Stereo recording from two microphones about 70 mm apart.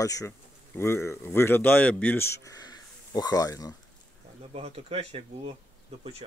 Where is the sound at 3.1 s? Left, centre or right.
Left.